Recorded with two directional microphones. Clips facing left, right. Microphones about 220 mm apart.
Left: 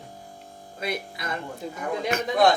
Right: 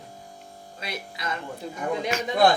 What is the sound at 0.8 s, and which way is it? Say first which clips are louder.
A man's voice: left 4 dB; 55° left (ahead or behind).